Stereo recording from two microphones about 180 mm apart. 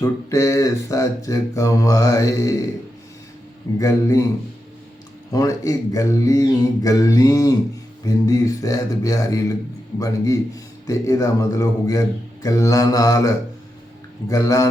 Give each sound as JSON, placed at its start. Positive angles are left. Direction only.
{"t": 0.0, "sound": "mantra", "side_deg": 20}
{"t": 3.8, "sound": "mantra", "side_deg": 15}
{"t": 5.3, "sound": "a man's voice", "side_deg": 20}